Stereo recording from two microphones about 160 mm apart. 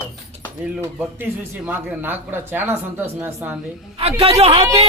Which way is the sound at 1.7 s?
10° right (ahead or behind).